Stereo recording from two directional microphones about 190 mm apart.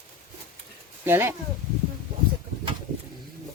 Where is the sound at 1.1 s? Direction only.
10° right (ahead or behind).